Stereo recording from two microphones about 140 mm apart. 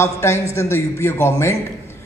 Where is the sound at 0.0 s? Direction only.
20° left (ahead or behind).